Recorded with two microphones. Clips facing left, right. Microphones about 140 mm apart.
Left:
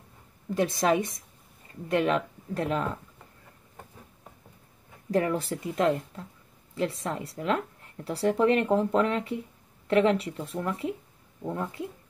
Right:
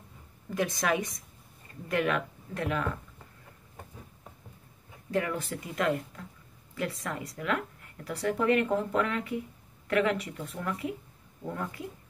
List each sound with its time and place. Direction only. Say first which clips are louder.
0.6 s speech: left 4 dB; 30° left (ahead or behind)
5.1 s speech: left 4 dB; 35° left (ahead or behind)